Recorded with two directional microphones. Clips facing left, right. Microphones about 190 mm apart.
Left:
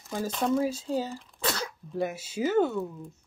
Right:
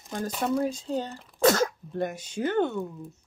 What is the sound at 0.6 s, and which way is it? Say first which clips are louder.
Speech: even; 5° left (ahead or behind).